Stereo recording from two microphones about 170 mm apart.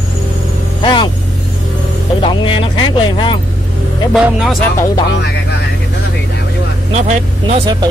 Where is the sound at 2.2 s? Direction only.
30° left (ahead or behind).